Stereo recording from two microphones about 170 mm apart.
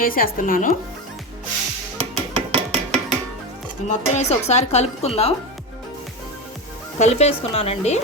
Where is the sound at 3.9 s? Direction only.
40° left (ahead or behind).